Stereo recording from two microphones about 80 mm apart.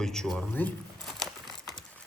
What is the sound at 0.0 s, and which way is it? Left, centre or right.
Speech, centre.